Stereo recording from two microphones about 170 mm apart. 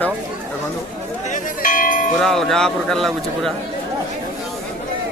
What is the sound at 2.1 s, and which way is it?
Speech, centre (ahead or behind).